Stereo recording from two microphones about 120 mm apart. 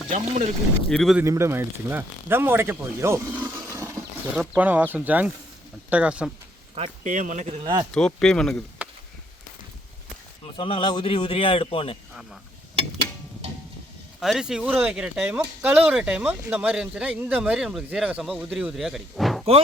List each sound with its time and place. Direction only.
0.1 s speech: 70° right (ahead or behind)
0.9 s speech: 5° left (ahead or behind)
1.2 s speech: 20° right (ahead or behind)
4.5 s speech: 15° right (ahead or behind)
7.0 s speech: 90° right
7.9 s speech: 5° left (ahead or behind)
10.4 s speech: 50° left (ahead or behind)
14.2 s speech: 5° right (ahead or behind)